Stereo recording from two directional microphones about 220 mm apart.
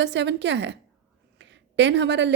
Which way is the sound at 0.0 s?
50° right (ahead or behind).